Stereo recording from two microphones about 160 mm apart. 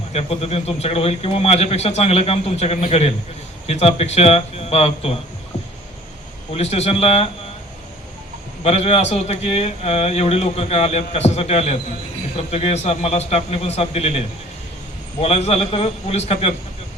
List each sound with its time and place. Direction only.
0.1 s a man's voice: 40° left (ahead or behind)
6.5 s a man's voice: 40° left (ahead or behind)
8.6 s a man's voice: 40° left (ahead or behind)
15.2 s a man's voice: 40° left (ahead or behind)